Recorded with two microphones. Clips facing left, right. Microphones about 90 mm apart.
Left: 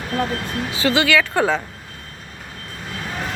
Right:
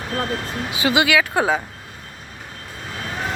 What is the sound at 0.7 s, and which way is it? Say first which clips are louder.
Speech: even; 15° right (ahead or behind).